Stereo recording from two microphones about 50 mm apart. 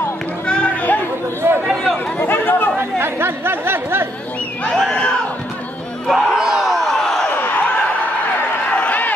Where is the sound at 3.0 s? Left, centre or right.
Right.